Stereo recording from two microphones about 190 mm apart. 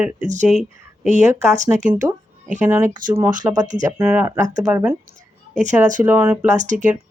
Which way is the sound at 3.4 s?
10° right (ahead or behind).